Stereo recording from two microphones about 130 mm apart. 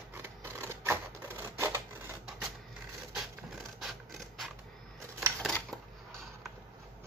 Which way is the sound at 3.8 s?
Centre (ahead or behind).